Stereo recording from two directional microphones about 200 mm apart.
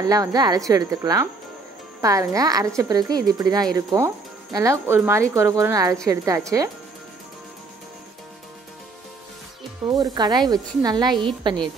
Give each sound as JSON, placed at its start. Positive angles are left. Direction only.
{"t": 0.0, "sound": "speech", "side_deg": -20}
{"t": 9.8, "sound": "speech", "side_deg": -20}